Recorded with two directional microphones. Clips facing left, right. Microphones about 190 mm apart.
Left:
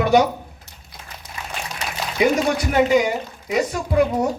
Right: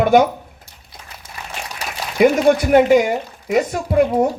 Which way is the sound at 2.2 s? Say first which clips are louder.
Right 6 dB; 50° right (ahead or behind).